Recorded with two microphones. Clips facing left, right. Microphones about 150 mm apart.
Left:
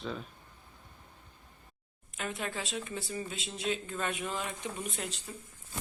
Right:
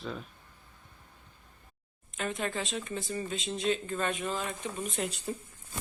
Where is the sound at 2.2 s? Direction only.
5° left (ahead or behind).